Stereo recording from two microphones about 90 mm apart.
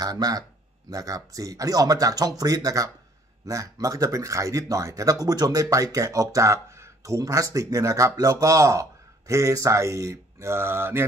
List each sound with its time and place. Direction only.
0.0 s speech: 45° right (ahead or behind); by 11.1 s 25° right (ahead or behind)